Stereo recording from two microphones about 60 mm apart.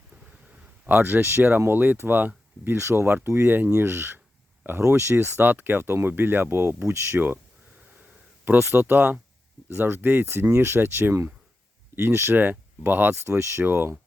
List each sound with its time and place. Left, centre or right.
0.9 s speech: right
4.8 s speech: right
5.1 s speech: right
8.4 s speech: right